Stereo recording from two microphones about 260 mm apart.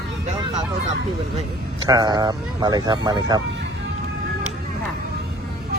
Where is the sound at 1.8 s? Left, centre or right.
Centre.